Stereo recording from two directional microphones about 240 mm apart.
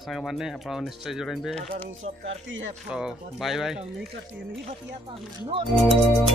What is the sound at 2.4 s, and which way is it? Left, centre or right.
Speech, right.